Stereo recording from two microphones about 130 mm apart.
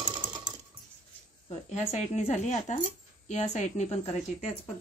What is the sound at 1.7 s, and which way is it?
Speech, 55° left (ahead or behind).